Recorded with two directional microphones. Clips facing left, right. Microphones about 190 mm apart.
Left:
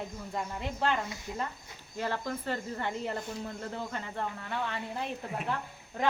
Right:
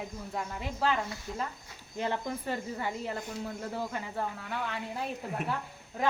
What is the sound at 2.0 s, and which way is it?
Speech, 15° right (ahead or behind).